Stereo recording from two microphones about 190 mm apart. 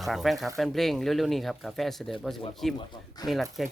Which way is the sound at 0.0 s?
Centre (ahead or behind).